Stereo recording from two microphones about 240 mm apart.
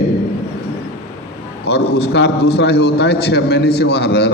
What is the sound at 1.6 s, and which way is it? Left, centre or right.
A man's voice, left.